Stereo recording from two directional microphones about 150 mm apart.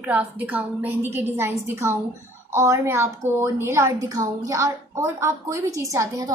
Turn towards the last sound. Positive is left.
turn(degrees=-20)  # may be behind; listen again after turning